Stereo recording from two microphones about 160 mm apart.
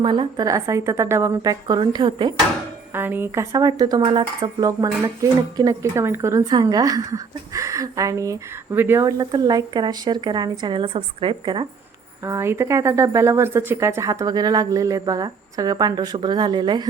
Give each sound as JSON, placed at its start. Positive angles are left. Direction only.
{"t": 0.0, "sound": "speech", "side_deg": -30}
{"t": 2.9, "sound": "speech", "side_deg": -15}
{"t": 4.6, "sound": "speech", "side_deg": -20}
{"t": 12.2, "sound": "speech", "side_deg": -15}